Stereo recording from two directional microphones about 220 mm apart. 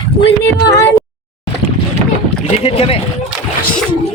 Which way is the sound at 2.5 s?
25° left (ahead or behind).